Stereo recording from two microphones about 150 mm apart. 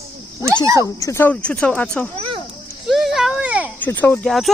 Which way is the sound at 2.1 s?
35° right (ahead or behind).